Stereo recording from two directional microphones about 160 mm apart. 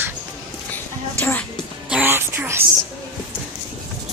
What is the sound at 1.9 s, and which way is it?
Music, 10° right (ahead or behind).